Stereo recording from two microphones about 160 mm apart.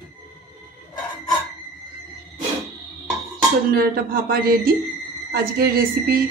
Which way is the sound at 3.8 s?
65° right (ahead or behind).